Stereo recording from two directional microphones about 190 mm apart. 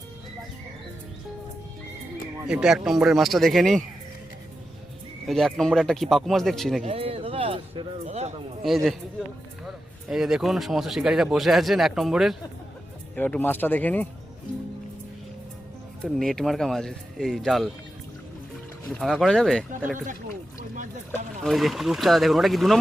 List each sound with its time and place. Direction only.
2.5 s speech: 5° right (ahead or behind)
5.2 s speech: centre (ahead or behind)
6.8 s speech: 30° right (ahead or behind)
8.6 s speech: centre (ahead or behind)
13.1 s speech: 10° left (ahead or behind)
16.0 s speech: centre (ahead or behind)
18.9 s speech: centre (ahead or behind)
21.4 s speech: centre (ahead or behind)